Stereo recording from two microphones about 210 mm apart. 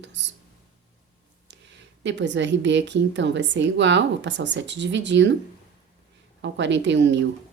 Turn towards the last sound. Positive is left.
turn(degrees=-55)  # may be behind; listen again after turning